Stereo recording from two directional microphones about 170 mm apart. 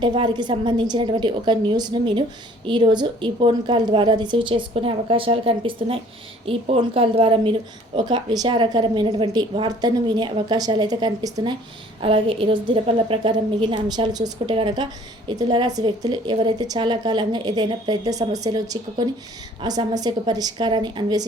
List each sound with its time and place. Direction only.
0.0 s a woman's voice: 25° right (ahead or behind)